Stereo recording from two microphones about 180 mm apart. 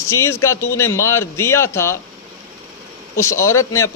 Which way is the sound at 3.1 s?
15° left (ahead or behind).